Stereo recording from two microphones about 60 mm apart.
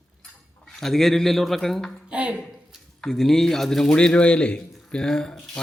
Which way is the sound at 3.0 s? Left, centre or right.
Centre.